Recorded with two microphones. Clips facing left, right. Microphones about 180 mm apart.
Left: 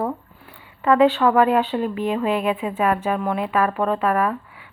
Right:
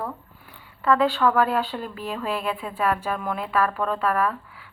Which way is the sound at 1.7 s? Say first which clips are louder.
Left 9 dB; 5° left (ahead or behind).